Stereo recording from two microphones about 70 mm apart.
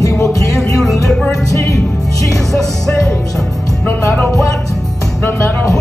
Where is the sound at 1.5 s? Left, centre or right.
Left.